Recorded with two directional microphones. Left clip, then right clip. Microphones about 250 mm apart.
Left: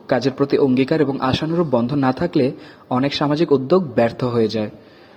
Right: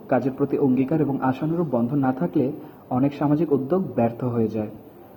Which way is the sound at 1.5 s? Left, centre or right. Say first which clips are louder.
Left 5 dB; left.